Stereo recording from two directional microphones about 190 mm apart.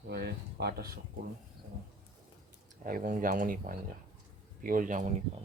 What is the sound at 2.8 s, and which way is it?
Speech, 45° right (ahead or behind).